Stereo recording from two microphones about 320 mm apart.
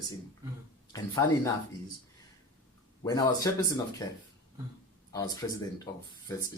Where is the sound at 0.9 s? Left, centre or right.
Centre.